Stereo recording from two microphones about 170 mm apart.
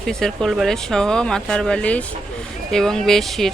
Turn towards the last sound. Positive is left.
turn(degrees=0)  # may be behind; listen again after turning